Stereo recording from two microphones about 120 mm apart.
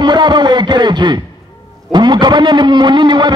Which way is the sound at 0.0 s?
40° right (ahead or behind).